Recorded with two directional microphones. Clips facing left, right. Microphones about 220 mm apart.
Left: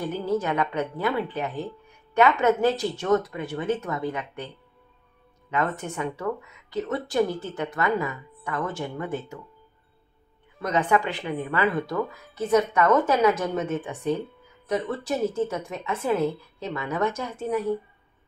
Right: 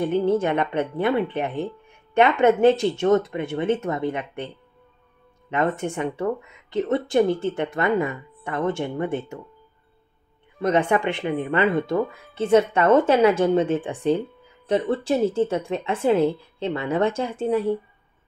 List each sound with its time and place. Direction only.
0.3 s speech: 25° right (ahead or behind)
5.5 s speech: 25° right (ahead or behind)
10.6 s speech: 25° right (ahead or behind)